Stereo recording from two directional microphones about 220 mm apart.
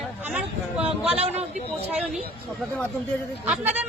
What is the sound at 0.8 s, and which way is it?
Speech, 25° right (ahead or behind).